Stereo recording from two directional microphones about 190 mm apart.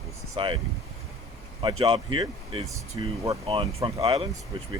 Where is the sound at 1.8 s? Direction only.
25° right (ahead or behind).